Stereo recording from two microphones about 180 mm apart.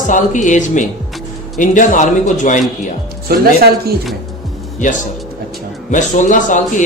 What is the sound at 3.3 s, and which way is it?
Speech, 60° right (ahead or behind).